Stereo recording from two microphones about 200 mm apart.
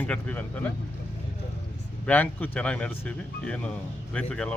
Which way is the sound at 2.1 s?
5° left (ahead or behind).